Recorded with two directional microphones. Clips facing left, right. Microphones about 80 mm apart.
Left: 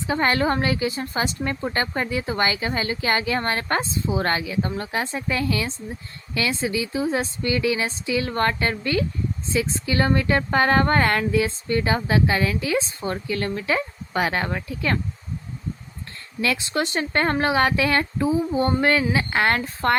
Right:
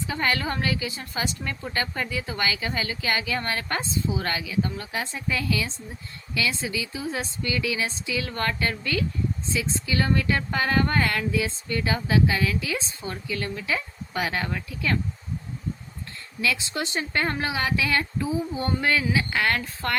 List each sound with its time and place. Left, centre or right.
0.1 s a woman's voice: left
16.4 s a woman's voice: left